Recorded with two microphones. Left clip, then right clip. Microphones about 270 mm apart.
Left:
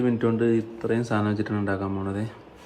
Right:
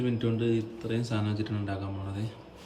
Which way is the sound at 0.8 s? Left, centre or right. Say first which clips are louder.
Left 8 dB; centre.